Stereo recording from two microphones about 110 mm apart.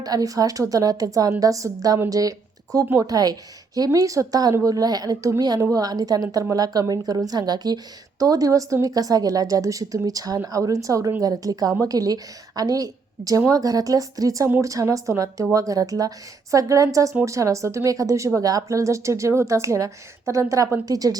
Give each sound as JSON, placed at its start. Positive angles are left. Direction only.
{"t": 0.0, "sound": "a woman's voice", "side_deg": -35}